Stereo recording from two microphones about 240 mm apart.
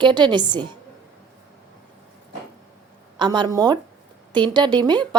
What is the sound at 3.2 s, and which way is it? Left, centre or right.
A woman's voice, centre.